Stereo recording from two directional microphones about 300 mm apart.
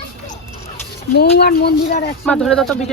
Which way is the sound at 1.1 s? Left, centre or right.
Left.